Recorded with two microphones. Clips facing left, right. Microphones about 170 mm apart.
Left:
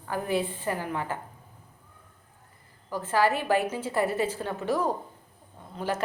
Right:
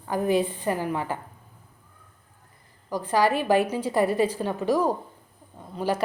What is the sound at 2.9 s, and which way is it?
A woman's voice, 15° right (ahead or behind).